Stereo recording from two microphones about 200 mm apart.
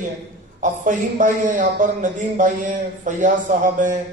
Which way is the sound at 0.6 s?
40° right (ahead or behind).